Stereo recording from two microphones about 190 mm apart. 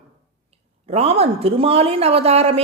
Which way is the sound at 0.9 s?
30° right (ahead or behind).